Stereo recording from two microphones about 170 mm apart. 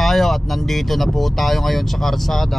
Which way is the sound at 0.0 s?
Centre (ahead or behind).